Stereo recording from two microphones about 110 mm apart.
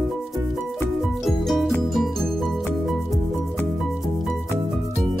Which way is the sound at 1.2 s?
Centre (ahead or behind).